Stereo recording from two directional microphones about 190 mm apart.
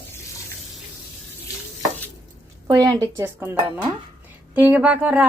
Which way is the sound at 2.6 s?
20° right (ahead or behind).